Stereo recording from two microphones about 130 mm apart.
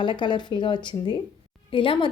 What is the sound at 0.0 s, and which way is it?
A woman's voice, 35° left (ahead or behind).